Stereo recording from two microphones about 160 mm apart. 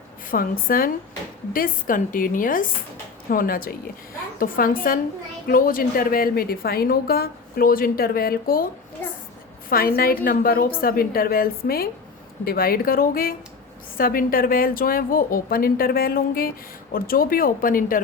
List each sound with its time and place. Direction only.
0.3 s a woman's voice: 65° left (ahead or behind)
9.0 s a sound: 10° left (ahead or behind)
9.6 s a woman's voice: 65° left (ahead or behind)